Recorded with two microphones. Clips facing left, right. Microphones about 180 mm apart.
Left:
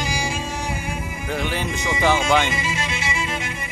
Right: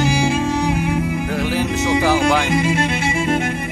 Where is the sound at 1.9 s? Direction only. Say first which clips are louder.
Right 2 dB; centre (ahead or behind).